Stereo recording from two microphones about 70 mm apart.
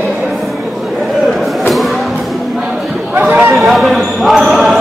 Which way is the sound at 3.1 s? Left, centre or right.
Right.